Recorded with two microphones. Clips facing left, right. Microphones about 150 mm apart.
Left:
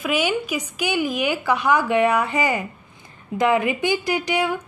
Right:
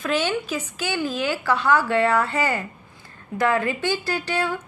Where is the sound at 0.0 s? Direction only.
10° left (ahead or behind).